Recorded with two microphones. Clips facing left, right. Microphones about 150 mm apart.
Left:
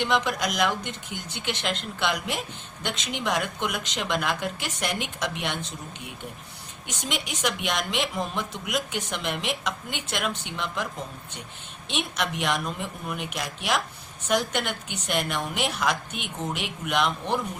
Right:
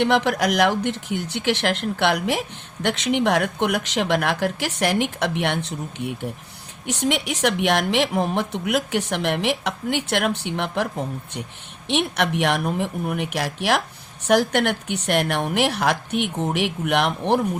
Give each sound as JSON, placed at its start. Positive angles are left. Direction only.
{"t": 0.0, "sound": "a woman's voice", "side_deg": -65}
{"t": 6.8, "sound": "a woman's voice", "side_deg": -65}